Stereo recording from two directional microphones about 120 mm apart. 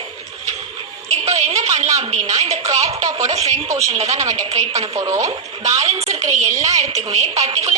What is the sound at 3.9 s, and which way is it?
Speech, 65° right (ahead or behind).